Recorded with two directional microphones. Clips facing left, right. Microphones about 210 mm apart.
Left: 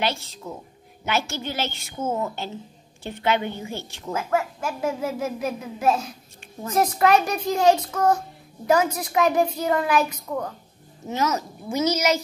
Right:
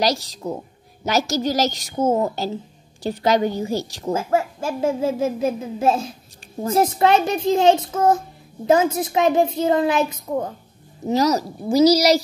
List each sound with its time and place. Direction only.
0.0 s a woman's voice: 40° right (ahead or behind)
11.1 s a woman's voice: 35° right (ahead or behind)